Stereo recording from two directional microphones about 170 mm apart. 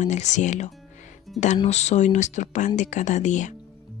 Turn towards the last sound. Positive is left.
turn(degrees=45)  # may be behind; listen again after turning